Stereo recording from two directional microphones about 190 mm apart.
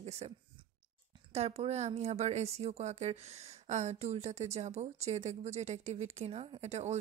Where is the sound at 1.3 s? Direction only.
35° right (ahead or behind).